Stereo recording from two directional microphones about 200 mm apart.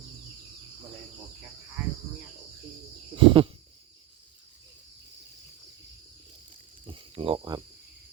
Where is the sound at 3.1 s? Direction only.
25° right (ahead or behind).